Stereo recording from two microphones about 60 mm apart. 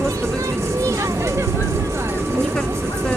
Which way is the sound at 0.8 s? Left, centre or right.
Right.